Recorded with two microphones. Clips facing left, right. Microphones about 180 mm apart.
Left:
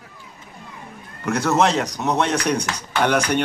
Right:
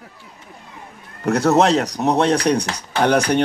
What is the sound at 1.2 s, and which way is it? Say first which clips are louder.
Speech: right 4 dB; 35° right (ahead or behind).